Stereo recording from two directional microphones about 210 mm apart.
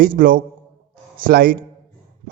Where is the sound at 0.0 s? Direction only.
40° right (ahead or behind).